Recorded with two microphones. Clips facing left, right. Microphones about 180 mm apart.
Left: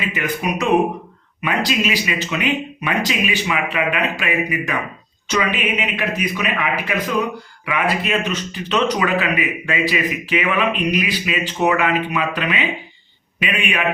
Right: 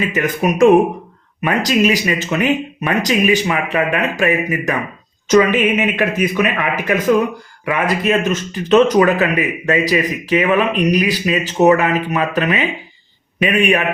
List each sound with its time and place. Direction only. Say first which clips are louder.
0.0 s a man's voice: right 6 dB; 45° right (ahead or behind)